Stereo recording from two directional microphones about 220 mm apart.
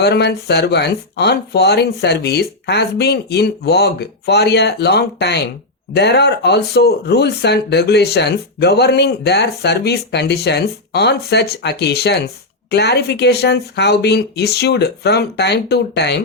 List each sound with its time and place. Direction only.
0.0 s speech: 50° left (ahead or behind)